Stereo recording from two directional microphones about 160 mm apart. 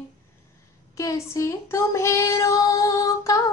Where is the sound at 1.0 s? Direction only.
20° left (ahead or behind).